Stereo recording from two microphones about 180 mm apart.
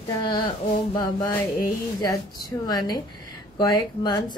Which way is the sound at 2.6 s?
20° left (ahead or behind).